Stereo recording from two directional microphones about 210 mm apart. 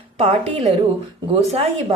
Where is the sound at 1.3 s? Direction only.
25° right (ahead or behind).